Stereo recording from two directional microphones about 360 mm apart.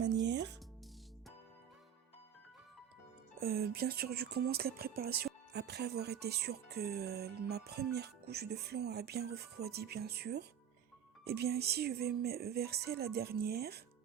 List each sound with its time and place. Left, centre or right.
0.3 s music: right
3.4 s speech: right